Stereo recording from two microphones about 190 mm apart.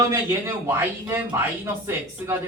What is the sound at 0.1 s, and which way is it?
Speech, 15° right (ahead or behind).